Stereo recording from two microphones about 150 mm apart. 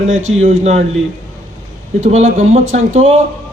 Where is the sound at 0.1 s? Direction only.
50° right (ahead or behind).